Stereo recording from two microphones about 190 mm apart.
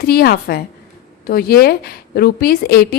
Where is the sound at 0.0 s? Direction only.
55° left (ahead or behind).